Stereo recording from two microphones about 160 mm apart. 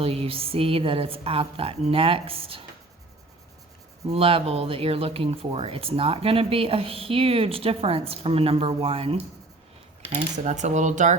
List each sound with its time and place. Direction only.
0.0 s speech: 35° right (ahead or behind)
4.1 s speech: 35° right (ahead or behind)
10.3 s speech: 50° right (ahead or behind)